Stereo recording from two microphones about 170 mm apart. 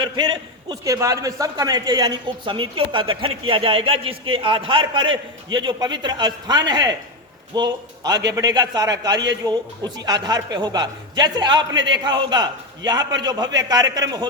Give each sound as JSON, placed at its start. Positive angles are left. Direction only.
{"t": 0.0, "sound": "a man's voice", "side_deg": -25}
{"t": 13.0, "sound": "a man's voice", "side_deg": -90}
{"t": 13.6, "sound": "a man's voice", "side_deg": -25}